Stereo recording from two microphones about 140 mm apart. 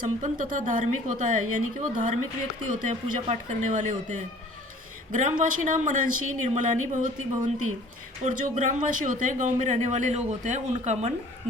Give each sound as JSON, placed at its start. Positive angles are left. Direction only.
{"t": 0.0, "sound": "speech", "side_deg": -70}
{"t": 5.4, "sound": "speech", "side_deg": -65}